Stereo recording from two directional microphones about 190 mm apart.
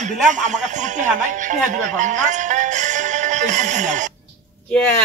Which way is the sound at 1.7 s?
40° right (ahead or behind).